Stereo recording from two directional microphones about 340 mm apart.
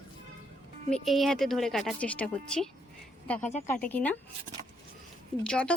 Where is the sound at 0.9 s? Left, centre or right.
Centre.